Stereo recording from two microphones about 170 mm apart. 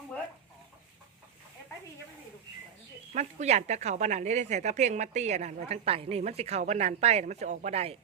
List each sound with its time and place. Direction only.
3.2 s a woman's voice: 40° right (ahead or behind)